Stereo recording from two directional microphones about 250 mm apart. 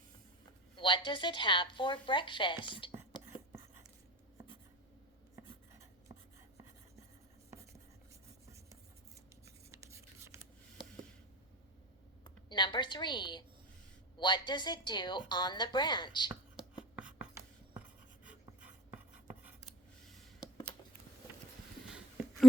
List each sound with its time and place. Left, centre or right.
0.8 s a woman's voice: centre
9.7 s writing: centre
12.2 s a woman's voice: centre
16.9 s writing: centre
21.8 s a sound: centre